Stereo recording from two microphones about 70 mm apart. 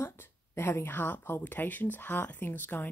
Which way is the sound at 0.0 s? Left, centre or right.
Left.